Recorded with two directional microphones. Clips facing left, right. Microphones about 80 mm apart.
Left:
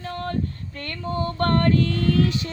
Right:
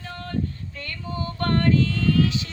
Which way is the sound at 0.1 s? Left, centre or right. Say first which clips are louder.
Left 2 dB; left.